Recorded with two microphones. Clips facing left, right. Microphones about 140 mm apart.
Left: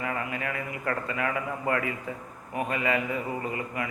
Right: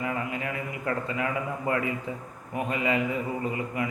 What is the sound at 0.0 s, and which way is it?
Speech, 25° right (ahead or behind).